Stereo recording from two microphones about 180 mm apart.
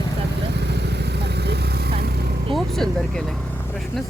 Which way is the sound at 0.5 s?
70° right (ahead or behind).